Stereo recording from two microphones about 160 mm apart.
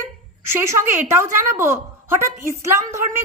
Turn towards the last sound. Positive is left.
turn(degrees=-15)  # may be behind; listen again after turning